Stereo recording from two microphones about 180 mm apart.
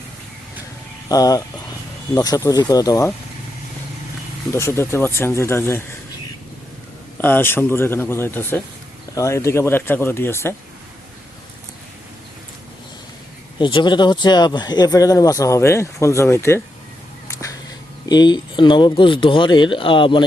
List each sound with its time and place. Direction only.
1.0 s speech: 20° left (ahead or behind)
4.5 s speech: 15° left (ahead or behind)
7.2 s speech: 10° left (ahead or behind)
13.6 s speech: 25° left (ahead or behind)
17.2 s a sound: 15° left (ahead or behind)
18.1 s speech: 25° left (ahead or behind)